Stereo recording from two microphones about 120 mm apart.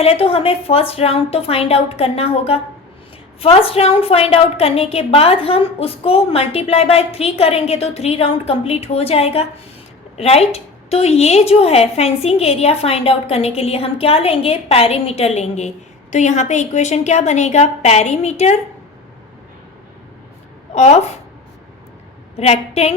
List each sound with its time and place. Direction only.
0.0 s a woman's voice: 55° left (ahead or behind)
3.4 s a woman's voice: 55° left (ahead or behind)
16.1 s a woman's voice: 80° left
20.7 s a woman's voice: 65° left (ahead or behind)
22.4 s a woman's voice: 60° left (ahead or behind)